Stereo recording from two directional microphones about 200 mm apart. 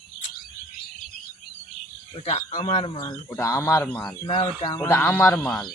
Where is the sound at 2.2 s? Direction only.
30° left (ahead or behind); by 4.1 s 10° left (ahead or behind).